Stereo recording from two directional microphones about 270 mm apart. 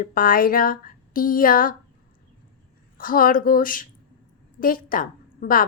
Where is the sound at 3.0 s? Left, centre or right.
Left.